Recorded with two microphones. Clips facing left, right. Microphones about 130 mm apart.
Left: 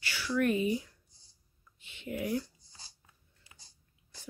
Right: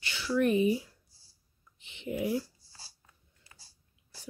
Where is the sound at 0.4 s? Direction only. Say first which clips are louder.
Right 3 dB; 25° right (ahead or behind).